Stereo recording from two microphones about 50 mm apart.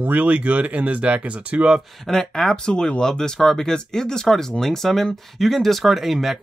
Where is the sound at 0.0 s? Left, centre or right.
Right.